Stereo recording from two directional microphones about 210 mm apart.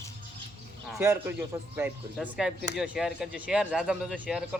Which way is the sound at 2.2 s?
Centre (ahead or behind).